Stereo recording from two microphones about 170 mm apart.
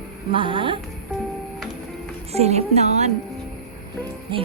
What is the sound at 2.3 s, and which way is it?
Speech, 40° right (ahead or behind).